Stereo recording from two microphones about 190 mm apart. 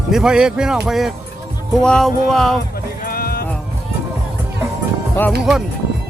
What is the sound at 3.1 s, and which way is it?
Sheep, 50° left (ahead or behind).